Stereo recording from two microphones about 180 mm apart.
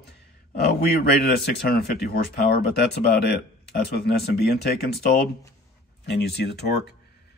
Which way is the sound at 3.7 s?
60° left (ahead or behind).